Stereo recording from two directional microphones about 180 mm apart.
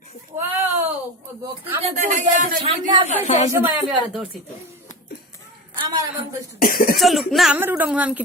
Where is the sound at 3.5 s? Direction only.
15° right (ahead or behind).